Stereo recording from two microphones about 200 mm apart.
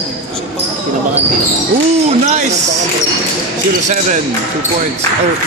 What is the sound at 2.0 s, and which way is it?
Speech, 35° right (ahead or behind).